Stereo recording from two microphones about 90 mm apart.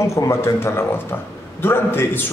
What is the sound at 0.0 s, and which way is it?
A man's voice, 30° left (ahead or behind).